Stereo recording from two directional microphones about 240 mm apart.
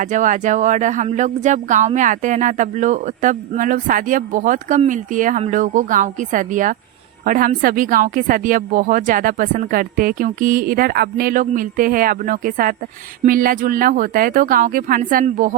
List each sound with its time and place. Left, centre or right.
0.0 s speech: right